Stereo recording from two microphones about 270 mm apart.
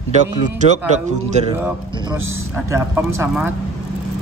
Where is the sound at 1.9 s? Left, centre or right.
Centre.